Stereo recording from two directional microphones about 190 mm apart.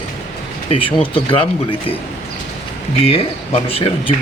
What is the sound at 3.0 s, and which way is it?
Speech, 30° left (ahead or behind).